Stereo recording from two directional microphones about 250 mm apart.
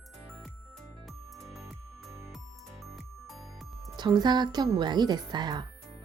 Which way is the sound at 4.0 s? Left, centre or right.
Centre.